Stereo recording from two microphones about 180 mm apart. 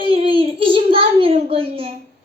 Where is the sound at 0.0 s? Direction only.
30° right (ahead or behind).